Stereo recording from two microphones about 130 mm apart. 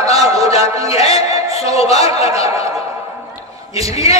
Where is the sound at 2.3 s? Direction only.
25° right (ahead or behind).